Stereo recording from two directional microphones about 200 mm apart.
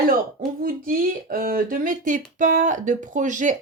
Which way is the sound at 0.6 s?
45° right (ahead or behind).